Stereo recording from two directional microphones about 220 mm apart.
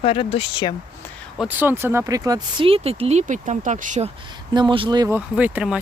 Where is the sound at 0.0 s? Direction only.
25° left (ahead or behind).